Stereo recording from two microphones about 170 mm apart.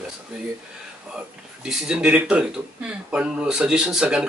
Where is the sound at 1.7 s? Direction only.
5° right (ahead or behind).